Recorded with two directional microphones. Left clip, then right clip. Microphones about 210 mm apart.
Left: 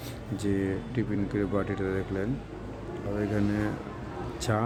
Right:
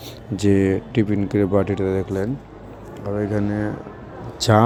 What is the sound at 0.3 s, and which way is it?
Speech, 35° right (ahead or behind).